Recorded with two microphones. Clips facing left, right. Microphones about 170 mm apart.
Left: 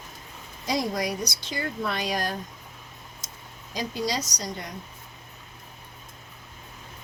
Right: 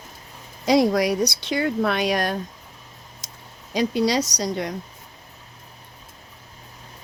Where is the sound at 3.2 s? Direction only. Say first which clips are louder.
Right 1 dB; 65° right (ahead or behind).